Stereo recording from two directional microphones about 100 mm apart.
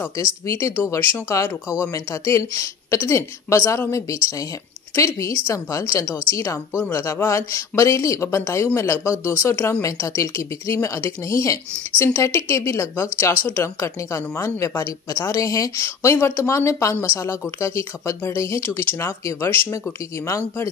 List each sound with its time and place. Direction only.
0.0 s a woman's voice: 25° left (ahead or behind)